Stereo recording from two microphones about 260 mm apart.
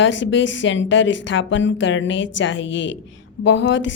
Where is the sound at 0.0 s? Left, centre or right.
Left.